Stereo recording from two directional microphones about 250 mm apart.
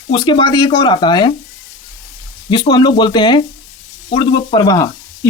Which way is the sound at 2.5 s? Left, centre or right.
Centre.